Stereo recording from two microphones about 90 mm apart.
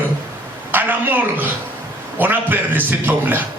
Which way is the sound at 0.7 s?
20° right (ahead or behind).